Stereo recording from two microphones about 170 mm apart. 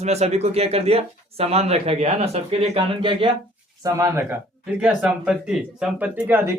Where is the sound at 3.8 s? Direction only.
15° right (ahead or behind).